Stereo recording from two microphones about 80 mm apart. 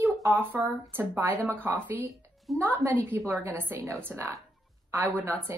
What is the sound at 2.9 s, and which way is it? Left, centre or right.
A woman's voice, right.